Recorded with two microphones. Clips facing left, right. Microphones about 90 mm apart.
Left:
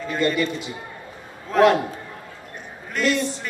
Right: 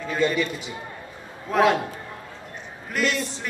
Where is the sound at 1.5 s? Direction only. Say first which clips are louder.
Left 3 dB; 5° right (ahead or behind).